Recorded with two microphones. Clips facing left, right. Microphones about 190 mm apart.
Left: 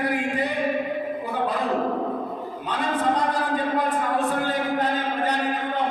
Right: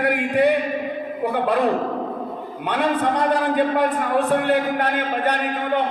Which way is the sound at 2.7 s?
65° right (ahead or behind).